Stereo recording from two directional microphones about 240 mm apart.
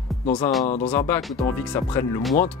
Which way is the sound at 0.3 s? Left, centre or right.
Centre.